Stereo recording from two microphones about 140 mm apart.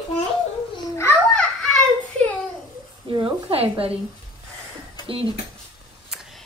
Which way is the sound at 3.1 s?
35° right (ahead or behind).